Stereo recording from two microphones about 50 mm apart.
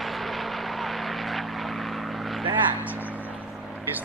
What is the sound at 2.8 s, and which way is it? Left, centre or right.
Vehicle, right.